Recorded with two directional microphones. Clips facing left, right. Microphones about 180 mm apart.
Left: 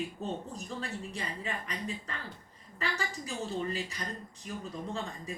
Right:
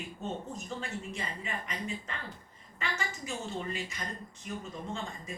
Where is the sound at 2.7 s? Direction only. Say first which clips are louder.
Left 2 dB; 35° left (ahead or behind).